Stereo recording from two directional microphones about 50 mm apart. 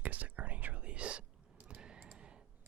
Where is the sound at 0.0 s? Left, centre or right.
Right.